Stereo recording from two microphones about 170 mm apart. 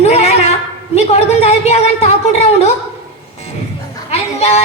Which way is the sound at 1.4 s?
40° left (ahead or behind).